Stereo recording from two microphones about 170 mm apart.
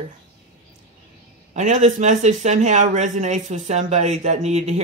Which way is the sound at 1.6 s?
50° right (ahead or behind).